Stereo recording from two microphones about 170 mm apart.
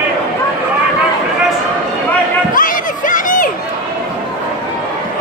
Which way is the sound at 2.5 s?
50° left (ahead or behind).